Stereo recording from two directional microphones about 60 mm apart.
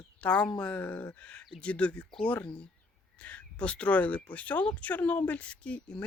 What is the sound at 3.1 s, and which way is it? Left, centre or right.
Speech, left.